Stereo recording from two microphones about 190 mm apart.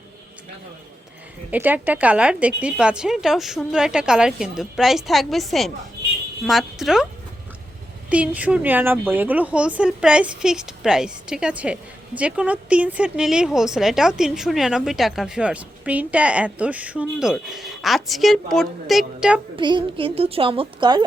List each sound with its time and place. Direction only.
1.5 s speech: 10° right (ahead or behind)
8.1 s speech: 5° right (ahead or behind)
19.5 s a woman's voice: 25° right (ahead or behind)